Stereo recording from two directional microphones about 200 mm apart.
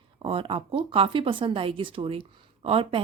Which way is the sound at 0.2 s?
25° right (ahead or behind).